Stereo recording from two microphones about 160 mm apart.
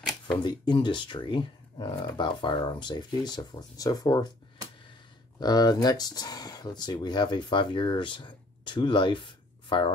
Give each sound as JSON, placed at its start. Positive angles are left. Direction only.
{"t": 0.4, "sound": "speech", "side_deg": 30}
{"t": 5.4, "sound": "speech", "side_deg": 25}